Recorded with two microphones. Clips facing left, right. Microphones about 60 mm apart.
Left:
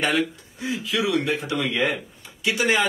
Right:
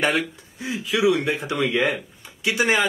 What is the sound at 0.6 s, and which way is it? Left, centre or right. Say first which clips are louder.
Speech: right 2 dB; right.